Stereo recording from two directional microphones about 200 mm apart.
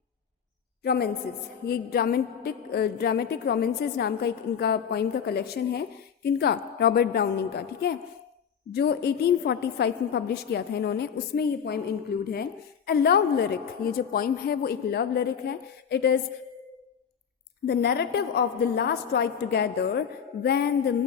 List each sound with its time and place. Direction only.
0.9 s a woman's voice: 50° left (ahead or behind)
17.7 s a woman's voice: 55° left (ahead or behind)